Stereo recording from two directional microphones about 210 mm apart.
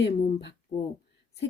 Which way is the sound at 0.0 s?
55° left (ahead or behind).